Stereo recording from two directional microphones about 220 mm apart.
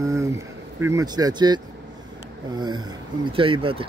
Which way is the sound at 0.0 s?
15° right (ahead or behind).